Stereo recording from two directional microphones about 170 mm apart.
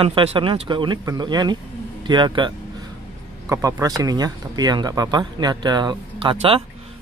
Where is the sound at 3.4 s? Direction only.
15° right (ahead or behind).